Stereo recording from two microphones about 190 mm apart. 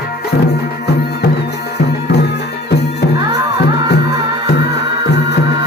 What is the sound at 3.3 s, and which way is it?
Music, 60° left (ahead or behind).